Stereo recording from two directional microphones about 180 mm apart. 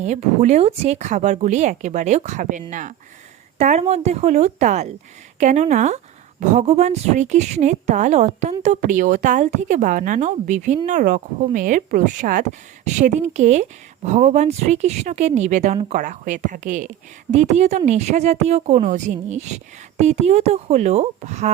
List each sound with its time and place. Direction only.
0.0 s a woman's voice: 40° right (ahead or behind)